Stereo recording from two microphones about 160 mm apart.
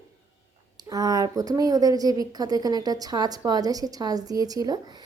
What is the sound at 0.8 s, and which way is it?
A woman's voice, 25° right (ahead or behind).